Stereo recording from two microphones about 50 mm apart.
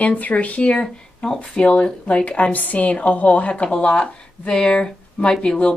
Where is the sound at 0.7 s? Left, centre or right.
Centre.